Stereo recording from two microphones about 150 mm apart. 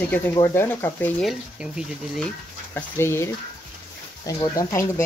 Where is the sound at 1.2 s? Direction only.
5° right (ahead or behind).